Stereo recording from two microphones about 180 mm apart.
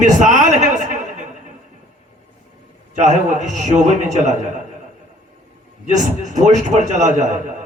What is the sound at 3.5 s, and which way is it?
Speech, 40° right (ahead or behind).